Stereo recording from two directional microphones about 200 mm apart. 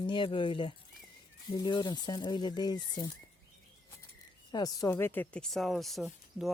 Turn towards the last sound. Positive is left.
turn(degrees=0)  # may be behind; listen again after turning